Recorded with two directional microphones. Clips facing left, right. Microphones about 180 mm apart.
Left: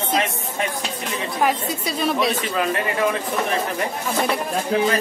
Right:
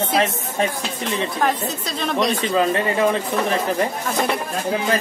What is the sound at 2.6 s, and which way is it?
Speech, 30° right (ahead or behind).